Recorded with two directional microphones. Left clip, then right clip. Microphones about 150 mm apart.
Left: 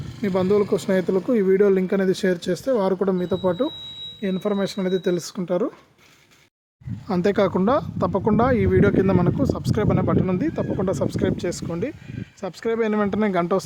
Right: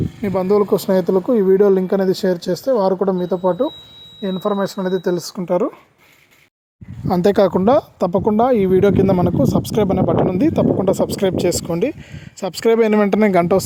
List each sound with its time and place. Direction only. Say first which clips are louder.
0.2 s a woman's voice: right 4 dB; 5° right (ahead or behind)
7.1 s speech: right 6 dB; 30° right (ahead or behind); by 13.6 s 45° right (ahead or behind)